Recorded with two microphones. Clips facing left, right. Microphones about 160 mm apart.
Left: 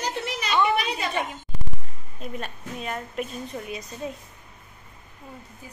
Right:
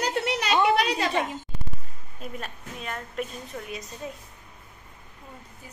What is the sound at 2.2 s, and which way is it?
Speech, centre (ahead or behind).